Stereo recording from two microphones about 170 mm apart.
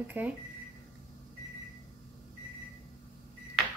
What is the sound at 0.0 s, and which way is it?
Speech, 10° right (ahead or behind).